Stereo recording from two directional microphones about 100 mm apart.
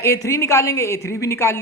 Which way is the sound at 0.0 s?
30° left (ahead or behind).